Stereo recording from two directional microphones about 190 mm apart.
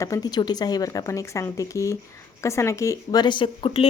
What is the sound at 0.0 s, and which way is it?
A woman's voice, 20° left (ahead or behind).